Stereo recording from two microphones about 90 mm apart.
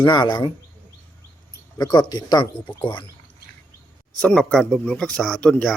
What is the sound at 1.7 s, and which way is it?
Speech, 45° left (ahead or behind).